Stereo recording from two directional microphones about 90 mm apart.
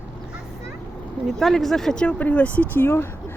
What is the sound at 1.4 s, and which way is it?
Speech, centre (ahead or behind).